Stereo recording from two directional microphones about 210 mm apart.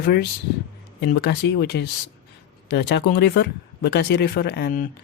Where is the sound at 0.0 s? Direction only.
50° left (ahead or behind).